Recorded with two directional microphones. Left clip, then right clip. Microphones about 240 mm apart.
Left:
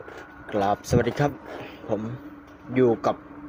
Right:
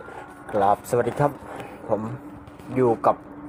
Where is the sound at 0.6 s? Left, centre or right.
Left.